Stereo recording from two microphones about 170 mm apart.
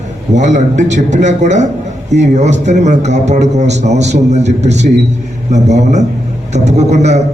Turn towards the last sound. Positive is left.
turn(degrees=-40)  # may be behind; listen again after turning